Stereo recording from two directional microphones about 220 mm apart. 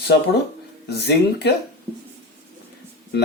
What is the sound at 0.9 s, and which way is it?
Speech, 50° left (ahead or behind).